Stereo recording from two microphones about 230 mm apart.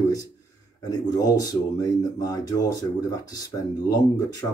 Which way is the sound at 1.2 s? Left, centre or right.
Centre.